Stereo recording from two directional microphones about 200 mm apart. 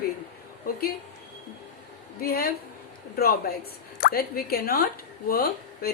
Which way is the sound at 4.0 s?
50° left (ahead or behind).